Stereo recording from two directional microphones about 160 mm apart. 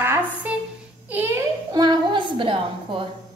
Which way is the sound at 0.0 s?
10° right (ahead or behind).